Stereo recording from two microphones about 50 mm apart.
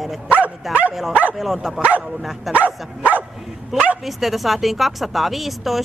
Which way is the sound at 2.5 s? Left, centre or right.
Right.